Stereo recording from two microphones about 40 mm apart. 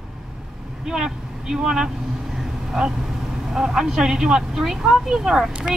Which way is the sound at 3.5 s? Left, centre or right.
Centre.